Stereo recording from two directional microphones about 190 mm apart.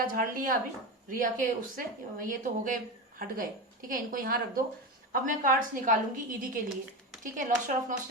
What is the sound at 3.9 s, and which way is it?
Speech, 45° right (ahead or behind).